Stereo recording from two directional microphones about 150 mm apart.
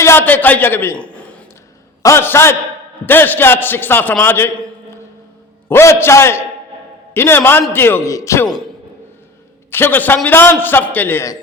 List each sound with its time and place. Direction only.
0.0 s a man's voice: 15° left (ahead or behind)
5.6 s a man's voice: 15° left (ahead or behind)
9.7 s a man's voice: 15° left (ahead or behind)